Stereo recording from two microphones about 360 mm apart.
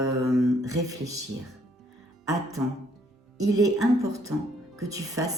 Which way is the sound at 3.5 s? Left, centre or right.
Centre.